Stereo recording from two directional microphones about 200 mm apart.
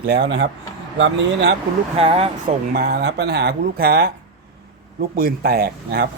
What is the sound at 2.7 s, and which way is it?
Speech, 55° right (ahead or behind).